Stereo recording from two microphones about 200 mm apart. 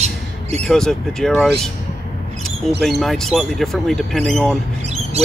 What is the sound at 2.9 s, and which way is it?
Speech, centre (ahead or behind).